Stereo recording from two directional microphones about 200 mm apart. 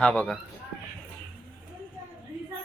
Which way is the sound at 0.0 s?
5° left (ahead or behind).